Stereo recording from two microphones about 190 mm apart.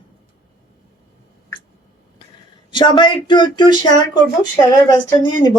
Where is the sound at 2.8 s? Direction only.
25° left (ahead or behind).